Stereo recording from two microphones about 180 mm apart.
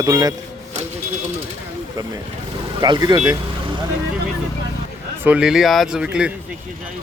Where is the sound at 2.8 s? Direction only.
25° right (ahead or behind).